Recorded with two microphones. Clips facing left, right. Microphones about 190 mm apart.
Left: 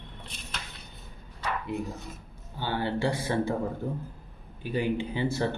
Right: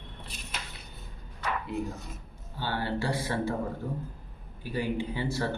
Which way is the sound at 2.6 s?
20° left (ahead or behind).